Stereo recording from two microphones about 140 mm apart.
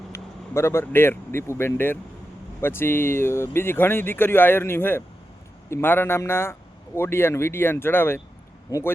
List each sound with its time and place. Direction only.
0.1 s speech: 20° left (ahead or behind)